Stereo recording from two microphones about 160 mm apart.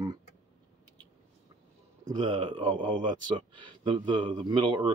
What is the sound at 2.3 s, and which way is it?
Speech, 30° right (ahead or behind).